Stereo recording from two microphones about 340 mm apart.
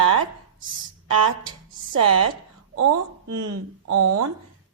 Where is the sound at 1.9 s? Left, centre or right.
Right.